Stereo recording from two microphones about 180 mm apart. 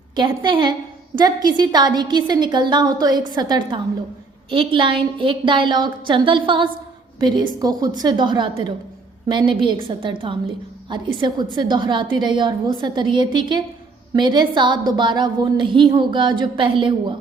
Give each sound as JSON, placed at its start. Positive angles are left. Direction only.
{"t": 0.2, "sound": "a woman's voice", "side_deg": -25}